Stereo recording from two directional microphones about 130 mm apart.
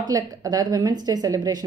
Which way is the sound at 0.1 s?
30° right (ahead or behind).